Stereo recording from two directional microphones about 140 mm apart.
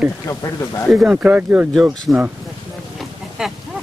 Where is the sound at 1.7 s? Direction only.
Centre (ahead or behind).